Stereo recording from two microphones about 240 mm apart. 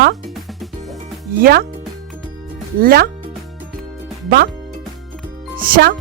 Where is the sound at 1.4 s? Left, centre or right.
Right.